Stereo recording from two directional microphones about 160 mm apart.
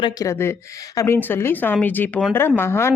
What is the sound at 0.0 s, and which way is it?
Speech, 25° left (ahead or behind).